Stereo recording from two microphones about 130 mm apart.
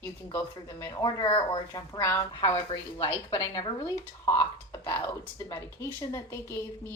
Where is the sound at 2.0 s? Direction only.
20° left (ahead or behind).